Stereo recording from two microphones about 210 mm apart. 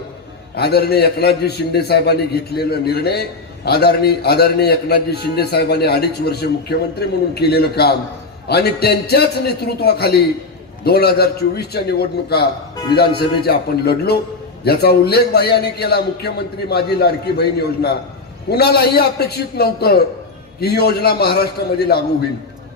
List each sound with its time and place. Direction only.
0.5 s a man's voice: 50° left (ahead or behind)
18.4 s a man's voice: 50° left (ahead or behind)